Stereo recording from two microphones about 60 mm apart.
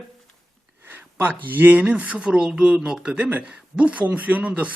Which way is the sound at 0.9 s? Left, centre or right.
Right.